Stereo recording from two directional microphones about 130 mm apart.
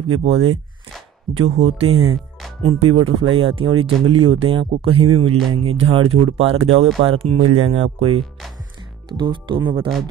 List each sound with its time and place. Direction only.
0.2 s speech: 50° right (ahead or behind)